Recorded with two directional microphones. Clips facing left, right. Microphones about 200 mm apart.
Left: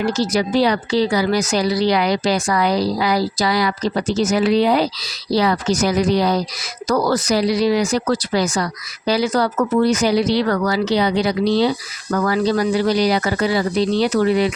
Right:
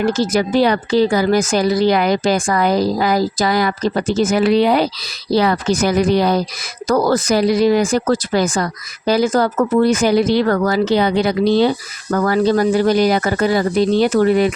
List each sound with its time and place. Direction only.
0.0 s speech: 55° right (ahead or behind)